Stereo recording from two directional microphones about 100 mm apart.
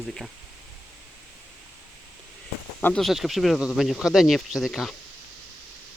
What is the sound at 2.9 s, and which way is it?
Speech, centre (ahead or behind).